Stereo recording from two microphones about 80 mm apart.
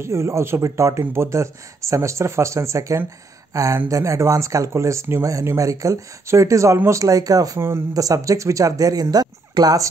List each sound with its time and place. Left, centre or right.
0.0 s speech: right